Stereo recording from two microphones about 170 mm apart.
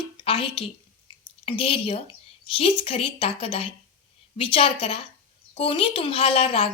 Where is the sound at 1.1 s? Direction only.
30° left (ahead or behind).